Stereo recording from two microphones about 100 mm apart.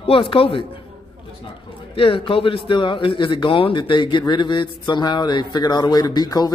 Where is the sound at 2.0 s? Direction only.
65° left (ahead or behind); by 6.5 s 40° left (ahead or behind).